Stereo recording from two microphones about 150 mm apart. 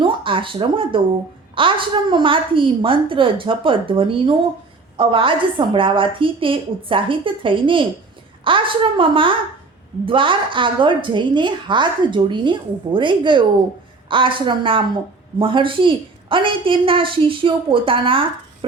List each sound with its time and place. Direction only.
0.0 s a woman's voice: 35° right (ahead or behind)